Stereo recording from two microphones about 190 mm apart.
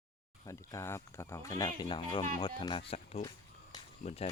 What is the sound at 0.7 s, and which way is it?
Speech, 15° left (ahead or behind).